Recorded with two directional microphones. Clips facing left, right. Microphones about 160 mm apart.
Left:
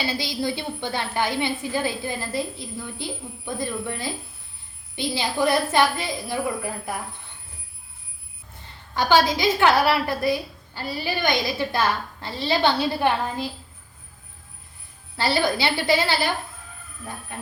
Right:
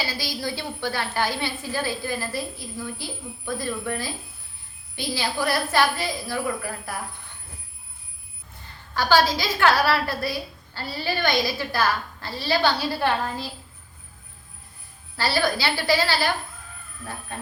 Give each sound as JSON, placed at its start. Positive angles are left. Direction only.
{"t": 0.1, "sound": "a woman's voice", "side_deg": 20}
{"t": 9.0, "sound": "a woman's voice", "side_deg": 20}
{"t": 15.1, "sound": "a woman's voice", "side_deg": 20}